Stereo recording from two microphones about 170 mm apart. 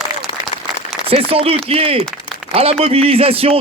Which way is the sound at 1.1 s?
35° right (ahead or behind).